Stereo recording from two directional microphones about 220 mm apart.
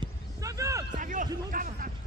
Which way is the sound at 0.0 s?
15° right (ahead or behind).